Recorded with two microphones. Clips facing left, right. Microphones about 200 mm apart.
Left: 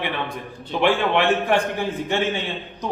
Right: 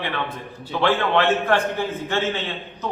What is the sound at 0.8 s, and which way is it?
Speech, 15° left (ahead or behind).